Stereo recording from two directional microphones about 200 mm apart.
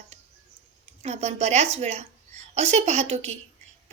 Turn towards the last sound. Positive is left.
turn(degrees=-35)  # may be behind; listen again after turning